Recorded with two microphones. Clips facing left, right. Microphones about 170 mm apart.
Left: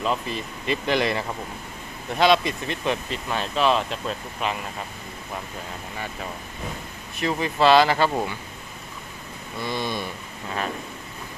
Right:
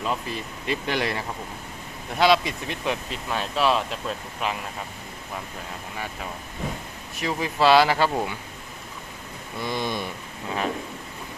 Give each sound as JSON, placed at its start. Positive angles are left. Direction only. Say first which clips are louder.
{"t": 0.0, "sound": "speech", "louder": "left 2 dB", "side_deg": -5}
{"t": 7.2, "sound": "speech", "louder": "left 2 dB", "side_deg": -5}
{"t": 9.6, "sound": "speech", "louder": "even", "side_deg": -15}